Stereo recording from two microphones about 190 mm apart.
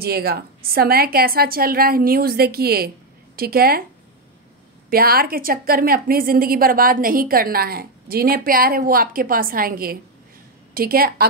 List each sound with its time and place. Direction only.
0.0 s a woman's voice: 55° right (ahead or behind)
4.8 s a woman's voice: 50° right (ahead or behind)